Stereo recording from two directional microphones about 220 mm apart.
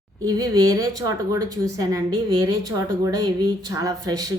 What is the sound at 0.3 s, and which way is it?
A woman's voice, 15° right (ahead or behind).